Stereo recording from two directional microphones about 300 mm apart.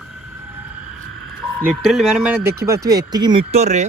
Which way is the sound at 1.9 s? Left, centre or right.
Centre.